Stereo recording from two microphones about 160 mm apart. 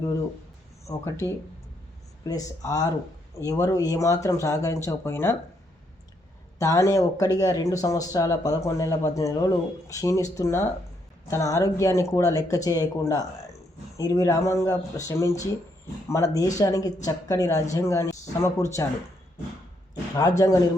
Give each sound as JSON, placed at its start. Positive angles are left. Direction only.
{"t": 0.9, "sound": "speech", "side_deg": 20}
{"t": 6.6, "sound": "speech", "side_deg": 20}
{"t": 19.9, "sound": "speech", "side_deg": 25}